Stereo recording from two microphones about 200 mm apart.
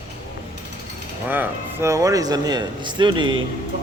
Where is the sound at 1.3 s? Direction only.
10° right (ahead or behind).